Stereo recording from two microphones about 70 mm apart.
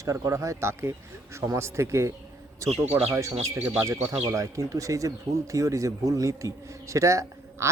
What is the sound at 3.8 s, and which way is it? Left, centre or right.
A man's voice, right.